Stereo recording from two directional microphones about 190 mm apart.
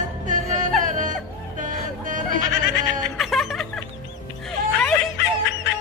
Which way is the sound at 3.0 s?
Centre (ahead or behind).